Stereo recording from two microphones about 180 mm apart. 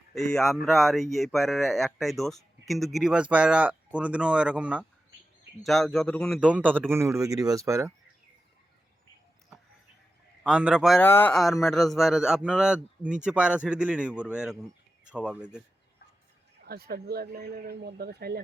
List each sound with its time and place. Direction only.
0.1 s speech: 5° left (ahead or behind); by 7.9 s 15° right (ahead or behind)
10.4 s speech: 5° right (ahead or behind)
11.0 s speech: 10° left (ahead or behind)
16.6 s speech: 60° right (ahead or behind)